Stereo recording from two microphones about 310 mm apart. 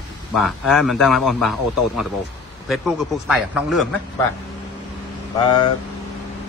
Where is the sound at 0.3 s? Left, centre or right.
Centre.